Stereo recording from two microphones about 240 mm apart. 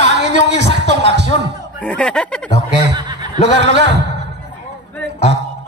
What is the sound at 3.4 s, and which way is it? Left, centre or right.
Speech, right.